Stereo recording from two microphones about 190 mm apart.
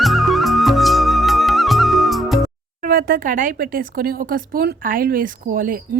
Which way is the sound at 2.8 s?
50° right (ahead or behind).